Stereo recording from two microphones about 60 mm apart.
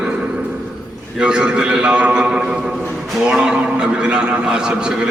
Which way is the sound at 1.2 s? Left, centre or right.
Centre.